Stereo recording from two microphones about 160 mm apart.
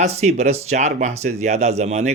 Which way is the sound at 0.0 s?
45° right (ahead or behind).